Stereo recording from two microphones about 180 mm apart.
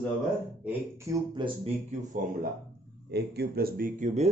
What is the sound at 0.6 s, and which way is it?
Speech, 15° right (ahead or behind).